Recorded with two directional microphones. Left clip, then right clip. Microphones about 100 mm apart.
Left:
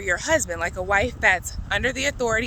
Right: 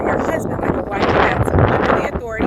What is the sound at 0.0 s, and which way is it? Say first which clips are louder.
Speech: right 4 dB; 30° left (ahead or behind).